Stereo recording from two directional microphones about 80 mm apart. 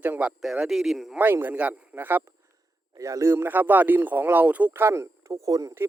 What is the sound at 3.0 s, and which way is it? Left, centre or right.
Speech, right.